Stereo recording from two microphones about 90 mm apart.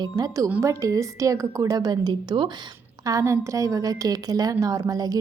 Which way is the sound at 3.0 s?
35° right (ahead or behind).